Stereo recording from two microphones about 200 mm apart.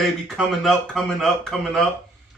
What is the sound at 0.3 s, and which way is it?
A man's voice, centre (ahead or behind).